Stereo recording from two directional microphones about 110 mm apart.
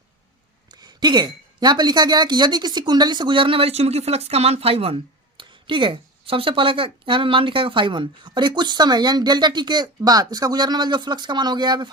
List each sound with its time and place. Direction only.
0.7 s a woman's voice: 40° right (ahead or behind); by 4.9 s 60° right (ahead or behind)
5.4 s a woman's voice: 50° right (ahead or behind)